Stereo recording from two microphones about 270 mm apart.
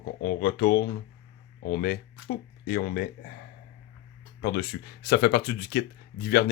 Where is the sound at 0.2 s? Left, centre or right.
Left.